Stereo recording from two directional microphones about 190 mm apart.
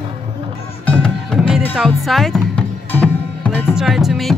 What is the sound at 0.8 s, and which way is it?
Music, 5° left (ahead or behind).